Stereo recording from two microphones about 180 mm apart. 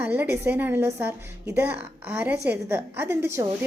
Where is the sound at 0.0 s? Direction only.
10° right (ahead or behind).